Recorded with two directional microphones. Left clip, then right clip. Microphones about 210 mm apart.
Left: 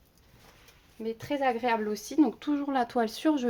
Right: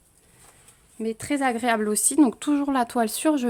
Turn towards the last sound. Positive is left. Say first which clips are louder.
# right 4 dB
turn(degrees=-25)  # may be behind; listen again after turning